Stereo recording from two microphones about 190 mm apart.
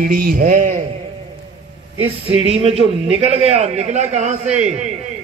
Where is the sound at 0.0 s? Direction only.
50° right (ahead or behind).